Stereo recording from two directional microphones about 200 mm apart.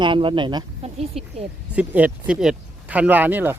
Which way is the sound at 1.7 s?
5° right (ahead or behind).